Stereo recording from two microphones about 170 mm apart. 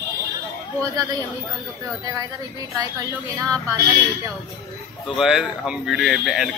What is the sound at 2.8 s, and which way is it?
Speech, 20° right (ahead or behind).